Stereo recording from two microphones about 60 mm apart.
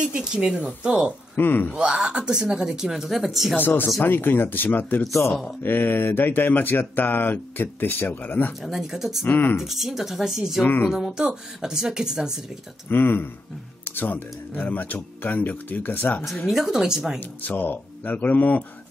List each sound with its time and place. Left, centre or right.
0.0 s speech: centre
1.3 s speech: left
1.8 s speech: centre
3.5 s speech: left
5.0 s a man's voice: left
5.6 s speech: left
8.5 s speech: centre
9.2 s speech: left
9.7 s speech: centre
10.6 s speech: left
10.9 s speech: centre
12.8 s speech: left
16.4 s speech: centre
17.2 s speech: left